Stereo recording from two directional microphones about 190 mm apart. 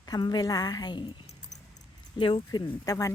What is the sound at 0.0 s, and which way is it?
Speech, 20° left (ahead or behind).